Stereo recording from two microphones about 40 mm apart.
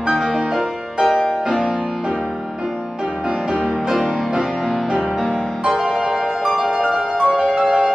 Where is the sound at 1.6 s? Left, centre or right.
Centre.